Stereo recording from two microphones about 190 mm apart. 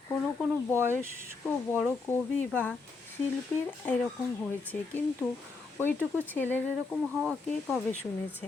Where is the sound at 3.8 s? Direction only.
10° left (ahead or behind).